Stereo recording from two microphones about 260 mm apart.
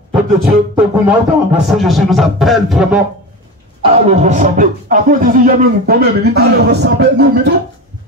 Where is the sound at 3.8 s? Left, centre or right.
Right.